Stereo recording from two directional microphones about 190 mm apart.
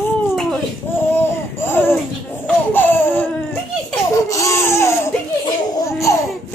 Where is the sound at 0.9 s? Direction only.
10° left (ahead or behind).